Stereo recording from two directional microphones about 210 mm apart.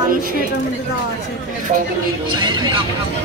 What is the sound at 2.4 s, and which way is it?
Speech, 20° right (ahead or behind).